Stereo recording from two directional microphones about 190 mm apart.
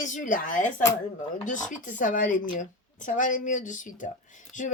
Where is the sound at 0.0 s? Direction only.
45° left (ahead or behind).